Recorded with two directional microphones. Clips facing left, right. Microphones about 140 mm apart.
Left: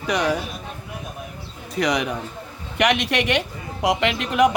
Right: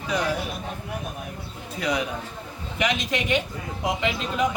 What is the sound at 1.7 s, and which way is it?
Speech, 75° left (ahead or behind).